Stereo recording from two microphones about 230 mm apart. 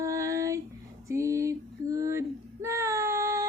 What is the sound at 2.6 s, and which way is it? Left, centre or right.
Child singing, centre.